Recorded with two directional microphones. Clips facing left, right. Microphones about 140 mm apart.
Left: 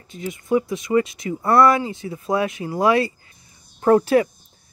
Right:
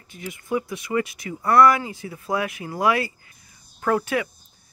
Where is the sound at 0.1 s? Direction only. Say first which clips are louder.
Left 6 dB; 25° left (ahead or behind).